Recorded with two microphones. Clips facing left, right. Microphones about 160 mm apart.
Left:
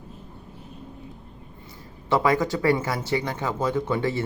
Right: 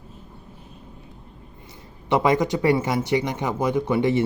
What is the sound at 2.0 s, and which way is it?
A man's voice, 20° right (ahead or behind).